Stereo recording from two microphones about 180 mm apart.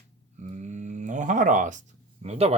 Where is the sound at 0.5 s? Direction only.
40° right (ahead or behind).